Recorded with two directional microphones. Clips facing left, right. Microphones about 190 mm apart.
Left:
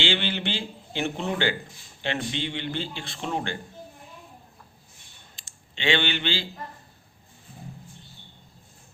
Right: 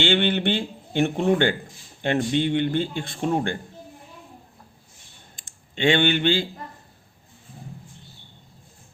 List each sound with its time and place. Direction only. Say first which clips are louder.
0.0 s a man's voice: right 6 dB; 55° right (ahead or behind)
5.4 s speech: right 9 dB; 50° right (ahead or behind)